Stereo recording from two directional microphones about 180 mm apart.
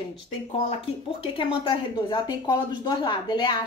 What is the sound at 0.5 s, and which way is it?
Speech, 30° left (ahead or behind).